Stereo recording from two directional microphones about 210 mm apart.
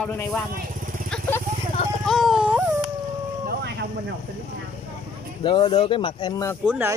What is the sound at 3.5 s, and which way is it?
Vehicle, 55° right (ahead or behind).